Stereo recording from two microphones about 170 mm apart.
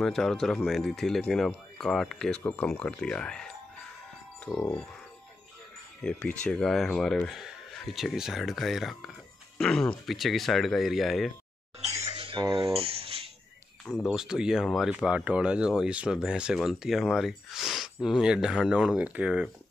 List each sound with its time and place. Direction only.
0.0 s speech: centre (ahead or behind)
5.9 s speech: 5° left (ahead or behind)
11.8 s a sound: 40° right (ahead or behind)
13.8 s speech: centre (ahead or behind)